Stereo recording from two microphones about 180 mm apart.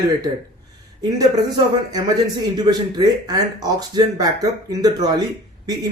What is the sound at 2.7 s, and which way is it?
Speech, 20° right (ahead or behind).